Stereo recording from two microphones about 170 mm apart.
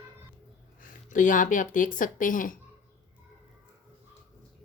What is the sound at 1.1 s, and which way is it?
Speech, 50° left (ahead or behind).